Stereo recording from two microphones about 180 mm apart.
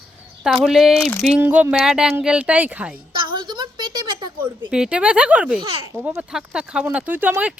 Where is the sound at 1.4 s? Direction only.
10° right (ahead or behind).